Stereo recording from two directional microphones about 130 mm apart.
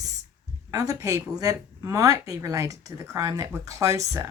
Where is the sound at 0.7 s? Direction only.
25° right (ahead or behind).